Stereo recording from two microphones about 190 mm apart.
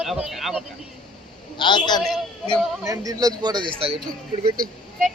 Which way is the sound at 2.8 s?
15° right (ahead or behind).